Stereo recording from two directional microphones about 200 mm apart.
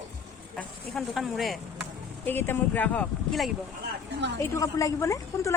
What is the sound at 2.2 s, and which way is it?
Speech, 10° left (ahead or behind).